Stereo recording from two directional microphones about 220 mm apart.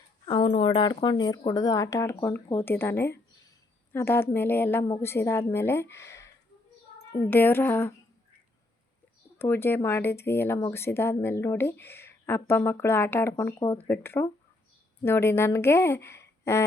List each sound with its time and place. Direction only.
0.3 s speech: 25° left (ahead or behind); by 7.9 s 10° left (ahead or behind)
9.4 s speech: 10° left (ahead or behind)